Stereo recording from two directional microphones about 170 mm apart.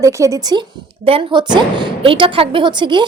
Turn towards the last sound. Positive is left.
turn(degrees=-25)  # may be behind; listen again after turning